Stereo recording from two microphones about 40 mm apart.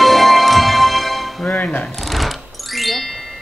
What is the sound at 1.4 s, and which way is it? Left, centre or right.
Music, left.